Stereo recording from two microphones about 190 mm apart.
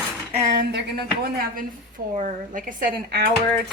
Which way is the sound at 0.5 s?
60° right (ahead or behind).